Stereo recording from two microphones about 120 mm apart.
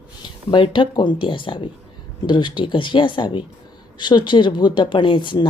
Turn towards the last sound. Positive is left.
turn(degrees=45)  # may be behind; listen again after turning